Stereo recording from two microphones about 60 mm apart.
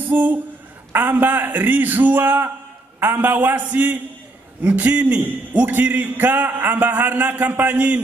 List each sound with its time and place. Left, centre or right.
0.0 s a man's voice: right